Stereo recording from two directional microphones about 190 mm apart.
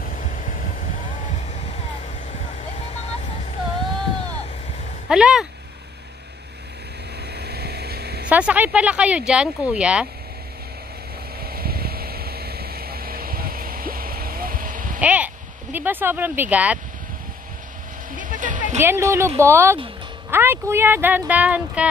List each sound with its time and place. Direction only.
0.0 s vehicle: 45° left (ahead or behind)
2.9 s vehicle: 35° left (ahead or behind)
5.0 s a sound: 5° right (ahead or behind)
7.3 s a sound: 60° right (ahead or behind)
8.3 s speech: 5° right (ahead or behind)
11.4 s vehicle: 55° right (ahead or behind)
15.0 s a sound: 5° right (ahead or behind)
18.1 s vehicle: 45° right (ahead or behind)
18.8 s speech: 15° right (ahead or behind)